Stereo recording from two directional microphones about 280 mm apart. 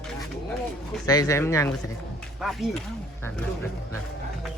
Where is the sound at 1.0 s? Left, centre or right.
Centre.